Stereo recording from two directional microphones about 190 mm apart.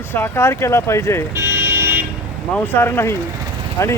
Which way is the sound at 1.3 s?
15° right (ahead or behind).